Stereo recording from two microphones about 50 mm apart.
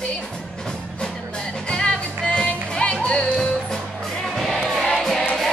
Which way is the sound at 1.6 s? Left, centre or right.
Centre.